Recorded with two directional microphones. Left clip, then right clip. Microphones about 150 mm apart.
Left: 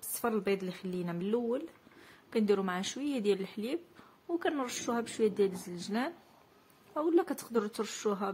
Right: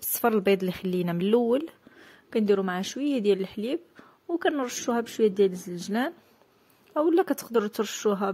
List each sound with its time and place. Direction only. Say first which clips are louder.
0.2 s speech: right 9 dB; 60° right (ahead or behind)
2.0 s speech: right 5 dB; 40° right (ahead or behind)